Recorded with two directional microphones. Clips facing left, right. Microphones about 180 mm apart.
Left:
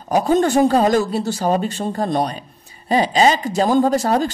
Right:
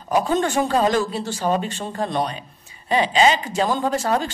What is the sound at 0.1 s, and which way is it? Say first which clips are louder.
A man's voice: left 4 dB; 40° left (ahead or behind).